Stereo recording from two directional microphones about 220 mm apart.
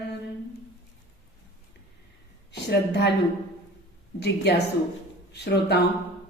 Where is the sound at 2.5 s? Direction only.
50° left (ahead or behind).